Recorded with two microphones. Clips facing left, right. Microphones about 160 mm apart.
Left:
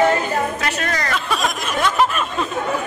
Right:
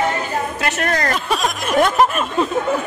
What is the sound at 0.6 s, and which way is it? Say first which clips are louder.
Music: right 3 dB; 50° right (ahead or behind).